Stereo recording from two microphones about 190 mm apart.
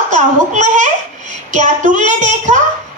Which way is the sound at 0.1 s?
40° right (ahead or behind).